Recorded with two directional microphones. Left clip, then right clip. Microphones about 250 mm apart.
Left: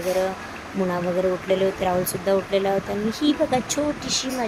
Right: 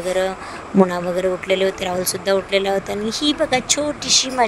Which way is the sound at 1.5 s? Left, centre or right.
Right.